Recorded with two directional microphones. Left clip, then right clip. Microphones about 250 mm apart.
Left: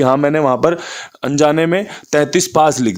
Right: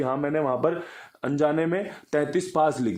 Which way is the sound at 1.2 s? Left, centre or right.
Left.